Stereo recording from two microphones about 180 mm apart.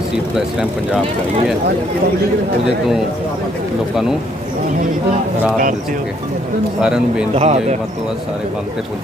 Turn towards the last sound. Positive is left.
turn(degrees=-40)  # may be behind; listen again after turning